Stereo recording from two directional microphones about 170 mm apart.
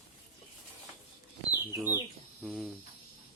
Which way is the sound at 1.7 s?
15° right (ahead or behind).